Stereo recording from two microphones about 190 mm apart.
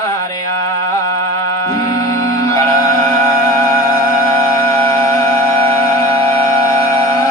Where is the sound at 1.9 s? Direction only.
15° left (ahead or behind).